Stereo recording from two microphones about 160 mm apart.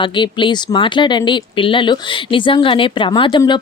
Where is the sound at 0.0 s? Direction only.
30° left (ahead or behind).